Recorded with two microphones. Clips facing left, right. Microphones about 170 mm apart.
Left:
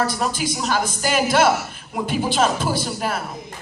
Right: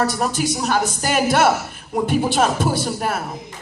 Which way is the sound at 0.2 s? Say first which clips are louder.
Right 2 dB; 50° right (ahead or behind).